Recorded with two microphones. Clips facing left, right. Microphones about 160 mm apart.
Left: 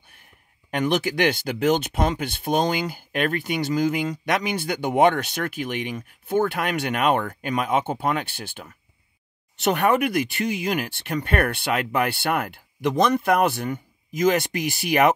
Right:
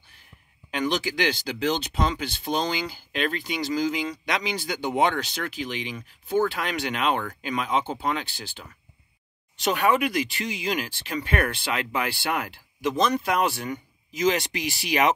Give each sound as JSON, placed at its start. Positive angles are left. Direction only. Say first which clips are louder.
{"t": 0.1, "sound": "speech", "louder": "even", "side_deg": 55}